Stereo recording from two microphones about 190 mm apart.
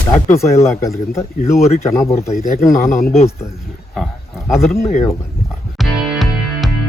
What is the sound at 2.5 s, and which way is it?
Speech, 45° left (ahead or behind).